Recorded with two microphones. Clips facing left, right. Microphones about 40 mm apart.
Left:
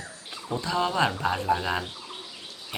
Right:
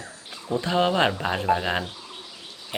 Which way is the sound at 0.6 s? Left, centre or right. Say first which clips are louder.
Right 3 dB; right.